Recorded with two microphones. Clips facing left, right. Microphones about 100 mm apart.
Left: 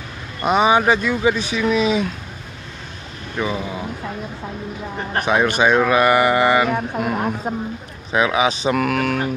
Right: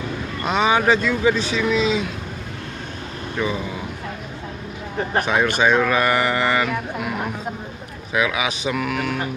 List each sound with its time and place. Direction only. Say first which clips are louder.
0.4 s speech: left 4 dB; 15° left (ahead or behind)
3.4 s speech: left 1 dB; 15° left (ahead or behind)
5.2 s speech: left 3 dB; 15° left (ahead or behind)
6.7 s speech: left 4 dB; 35° left (ahead or behind)
8.7 s a sound: left 4 dB; 50° left (ahead or behind)